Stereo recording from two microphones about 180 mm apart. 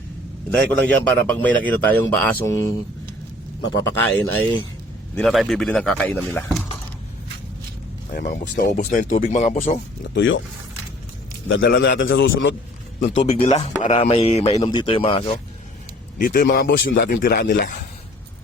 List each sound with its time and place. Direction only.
0.5 s a man's voice: 10° left (ahead or behind)
8.1 s speech: 55° left (ahead or behind)
10.0 s a man's voice: 90° left
11.4 s a man's voice: 90° left
13.6 s speech: 40° left (ahead or behind)
14.5 s speech: 25° left (ahead or behind)
16.1 s speech: 50° left (ahead or behind); by 17.1 s 80° left
17.2 s speech: 50° left (ahead or behind)